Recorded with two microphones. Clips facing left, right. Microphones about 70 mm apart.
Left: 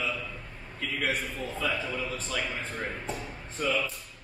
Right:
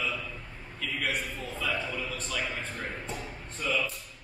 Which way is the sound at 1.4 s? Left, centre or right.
Left.